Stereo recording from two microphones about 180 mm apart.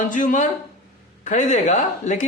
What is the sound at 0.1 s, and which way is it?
A man's voice, 45° left (ahead or behind).